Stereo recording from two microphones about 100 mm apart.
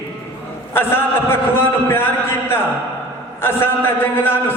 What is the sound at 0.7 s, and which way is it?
A man's voice, 25° left (ahead or behind).